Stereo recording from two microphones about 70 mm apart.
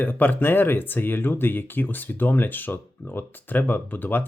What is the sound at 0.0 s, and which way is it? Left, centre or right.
Speech, left.